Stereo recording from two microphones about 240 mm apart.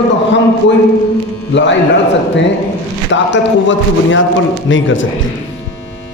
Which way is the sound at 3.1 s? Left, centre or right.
Left.